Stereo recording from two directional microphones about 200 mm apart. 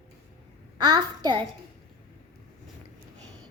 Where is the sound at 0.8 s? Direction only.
20° right (ahead or behind).